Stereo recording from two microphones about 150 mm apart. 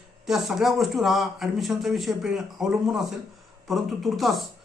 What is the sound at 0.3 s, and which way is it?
A man's voice, centre (ahead or behind).